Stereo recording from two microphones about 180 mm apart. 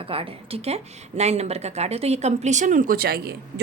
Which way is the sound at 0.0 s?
30° right (ahead or behind).